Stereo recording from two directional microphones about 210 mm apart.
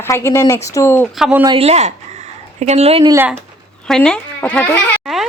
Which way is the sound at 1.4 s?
25° right (ahead or behind).